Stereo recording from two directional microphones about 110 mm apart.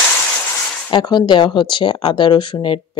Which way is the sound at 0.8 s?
40° left (ahead or behind).